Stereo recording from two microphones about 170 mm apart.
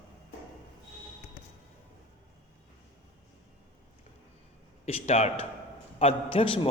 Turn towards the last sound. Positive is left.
turn(degrees=30)  # may be behind; listen again after turning